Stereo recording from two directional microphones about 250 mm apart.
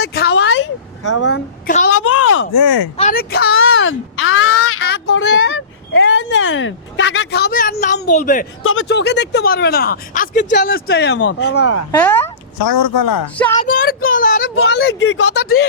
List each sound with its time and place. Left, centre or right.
0.0 s vehicle: left
1.2 s speech: left
1.9 s a sound: left
3.0 s speech: left
3.6 s a sound: left
4.8 s speech: left
8.6 s speech: left
11.6 s speech: left
11.9 s speech: centre
13.3 s speech: centre
13.7 s speech: left